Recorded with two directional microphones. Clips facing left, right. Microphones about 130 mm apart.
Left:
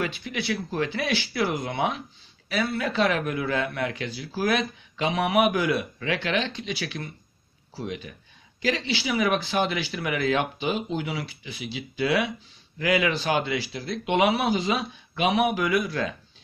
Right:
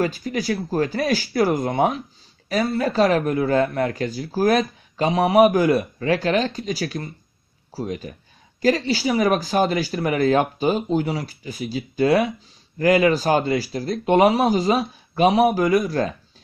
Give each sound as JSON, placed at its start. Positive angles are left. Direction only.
{"t": 0.0, "sound": "speech", "side_deg": -40}